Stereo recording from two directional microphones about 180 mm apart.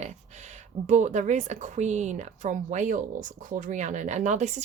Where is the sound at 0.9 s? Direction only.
40° right (ahead or behind).